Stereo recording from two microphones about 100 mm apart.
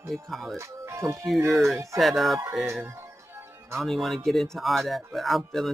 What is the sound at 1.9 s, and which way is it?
Speech, centre (ahead or behind).